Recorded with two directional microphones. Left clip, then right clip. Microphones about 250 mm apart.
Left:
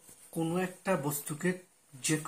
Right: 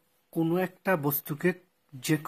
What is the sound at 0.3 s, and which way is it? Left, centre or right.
Speech, right.